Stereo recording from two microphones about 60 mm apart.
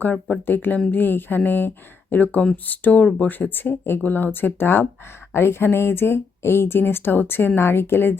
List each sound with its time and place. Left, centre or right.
0.0 s speech: left